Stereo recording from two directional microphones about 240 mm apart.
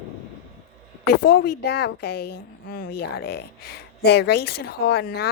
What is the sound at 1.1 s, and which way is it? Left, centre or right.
A woman's voice, left.